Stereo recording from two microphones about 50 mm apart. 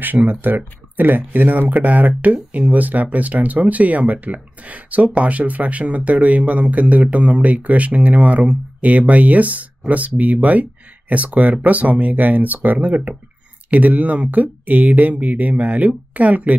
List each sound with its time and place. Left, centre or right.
0.0 s speech: right